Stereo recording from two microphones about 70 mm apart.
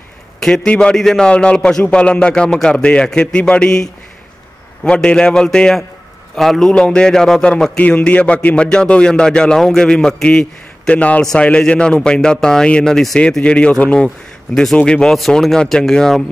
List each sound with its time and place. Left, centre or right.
0.4 s a man's voice: centre
13.4 s a man's voice: centre